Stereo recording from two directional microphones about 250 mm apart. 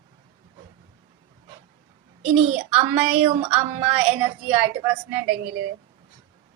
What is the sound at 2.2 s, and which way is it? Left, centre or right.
Speech, right.